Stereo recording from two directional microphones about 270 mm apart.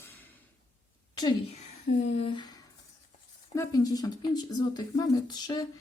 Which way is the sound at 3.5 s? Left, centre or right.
Centre.